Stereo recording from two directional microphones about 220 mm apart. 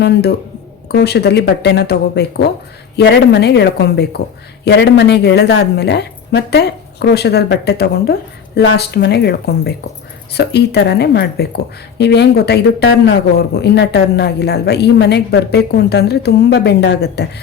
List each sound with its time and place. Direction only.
0.0 s speech: 50° left (ahead or behind)